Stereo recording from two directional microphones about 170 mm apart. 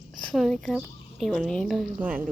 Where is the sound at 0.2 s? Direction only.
Centre (ahead or behind).